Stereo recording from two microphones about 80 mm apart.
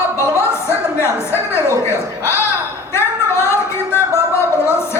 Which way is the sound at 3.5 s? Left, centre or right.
Left.